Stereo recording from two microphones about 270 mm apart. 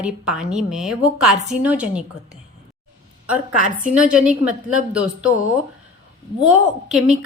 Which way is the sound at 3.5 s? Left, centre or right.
Right.